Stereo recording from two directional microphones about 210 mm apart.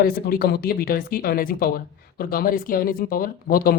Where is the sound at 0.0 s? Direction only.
45° left (ahead or behind).